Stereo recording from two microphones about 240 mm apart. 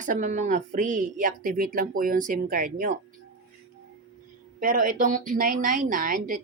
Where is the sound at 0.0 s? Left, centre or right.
Right.